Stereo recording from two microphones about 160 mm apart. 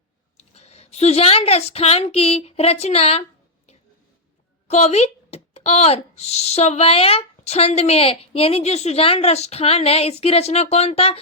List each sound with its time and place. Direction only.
0.3 s speech: 40° left (ahead or behind)
4.7 s a child's voice: 45° left (ahead or behind)